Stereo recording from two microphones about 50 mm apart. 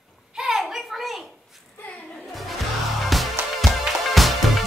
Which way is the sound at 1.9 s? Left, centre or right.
Left.